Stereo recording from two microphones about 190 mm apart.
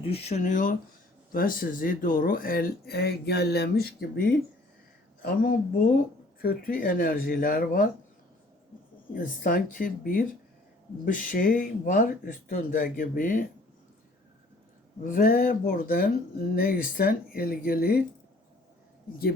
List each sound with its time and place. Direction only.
0.0 s speech: 30° left (ahead or behind); by 3.8 s 60° left (ahead or behind)
5.2 s speech: 50° left (ahead or behind)
9.1 s speech: 50° left (ahead or behind)
15.0 s speech: 45° left (ahead or behind)